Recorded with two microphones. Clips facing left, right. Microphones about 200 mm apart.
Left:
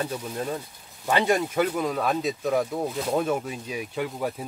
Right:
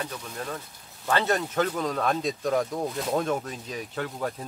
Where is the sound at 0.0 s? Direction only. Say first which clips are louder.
Left 5 dB; 25° left (ahead or behind).